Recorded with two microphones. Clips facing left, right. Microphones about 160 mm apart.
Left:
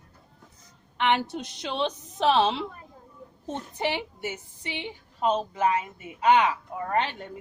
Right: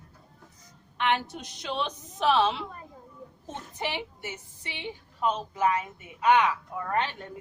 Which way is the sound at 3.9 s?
20° left (ahead or behind).